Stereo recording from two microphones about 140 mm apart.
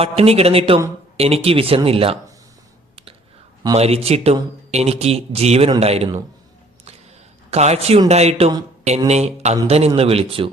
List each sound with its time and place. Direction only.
0.0 s speech: 45° right (ahead or behind)
2.9 s a sound: 40° right (ahead or behind)
3.8 s speech: 45° right (ahead or behind)
7.5 s speech: 50° right (ahead or behind)